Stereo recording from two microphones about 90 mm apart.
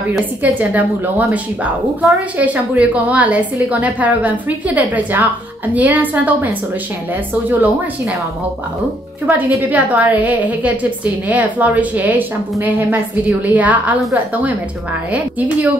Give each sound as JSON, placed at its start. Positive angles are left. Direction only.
{"t": 0.2, "sound": "a woman's voice", "side_deg": -20}
{"t": 9.6, "sound": "a woman's voice", "side_deg": -15}